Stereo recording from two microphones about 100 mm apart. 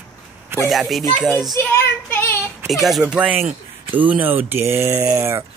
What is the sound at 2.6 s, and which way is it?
Speech, centre (ahead or behind).